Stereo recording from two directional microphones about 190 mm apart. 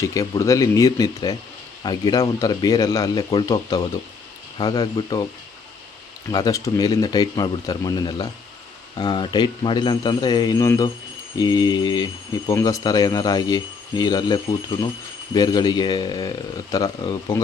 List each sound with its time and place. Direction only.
0.0 s speech: 15° left (ahead or behind)
6.3 s speech: 20° left (ahead or behind)